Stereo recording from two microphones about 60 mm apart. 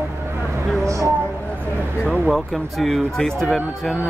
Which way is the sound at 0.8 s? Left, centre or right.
Right.